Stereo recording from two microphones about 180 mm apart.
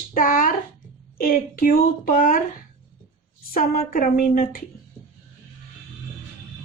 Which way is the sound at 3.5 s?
55° left (ahead or behind).